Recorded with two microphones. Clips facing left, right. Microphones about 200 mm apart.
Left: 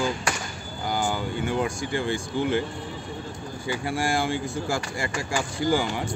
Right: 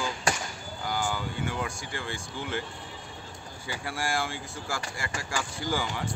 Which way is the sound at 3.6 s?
20° left (ahead or behind).